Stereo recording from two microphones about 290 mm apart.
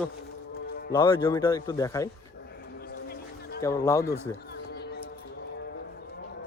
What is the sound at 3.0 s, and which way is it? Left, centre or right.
Music, left.